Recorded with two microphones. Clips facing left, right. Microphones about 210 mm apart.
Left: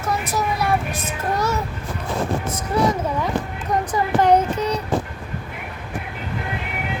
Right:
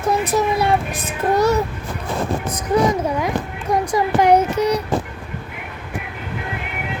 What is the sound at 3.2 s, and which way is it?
A child's voice, 10° right (ahead or behind).